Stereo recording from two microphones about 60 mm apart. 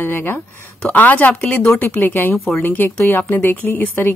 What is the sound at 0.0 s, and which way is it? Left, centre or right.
Speech, left.